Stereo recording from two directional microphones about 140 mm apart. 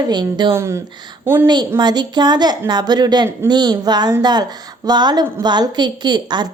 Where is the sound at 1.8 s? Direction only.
30° right (ahead or behind).